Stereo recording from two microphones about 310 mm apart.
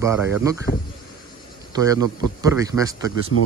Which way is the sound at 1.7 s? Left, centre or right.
Centre.